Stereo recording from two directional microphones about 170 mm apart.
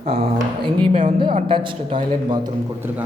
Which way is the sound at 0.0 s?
35° right (ahead or behind).